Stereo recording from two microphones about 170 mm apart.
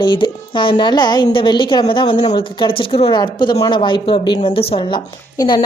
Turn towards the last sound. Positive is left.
turn(degrees=25)  # may be behind; listen again after turning